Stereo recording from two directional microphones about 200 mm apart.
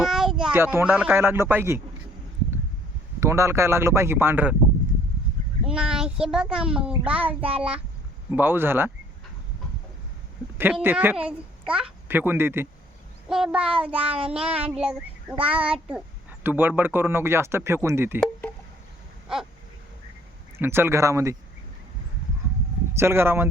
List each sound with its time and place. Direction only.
0.0 s speech: centre (ahead or behind)
3.2 s a child's voice: 15° right (ahead or behind)
5.6 s a child's voice: 5° right (ahead or behind)
10.6 s a child's voice: 10° right (ahead or behind)
20.6 s a child's voice: 10° right (ahead or behind)
23.0 s a child's voice: 10° right (ahead or behind)